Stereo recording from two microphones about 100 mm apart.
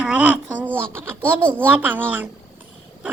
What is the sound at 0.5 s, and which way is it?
A child's voice, 15° right (ahead or behind).